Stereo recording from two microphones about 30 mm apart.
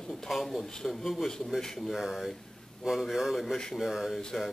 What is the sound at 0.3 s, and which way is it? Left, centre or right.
Speech, centre.